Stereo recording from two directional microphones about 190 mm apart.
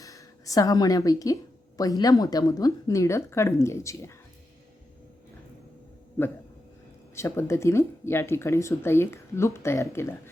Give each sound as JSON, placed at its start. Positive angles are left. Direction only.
{"t": 0.0, "sound": "a woman's voice", "side_deg": 15}
{"t": 7.2, "sound": "a woman's voice", "side_deg": 15}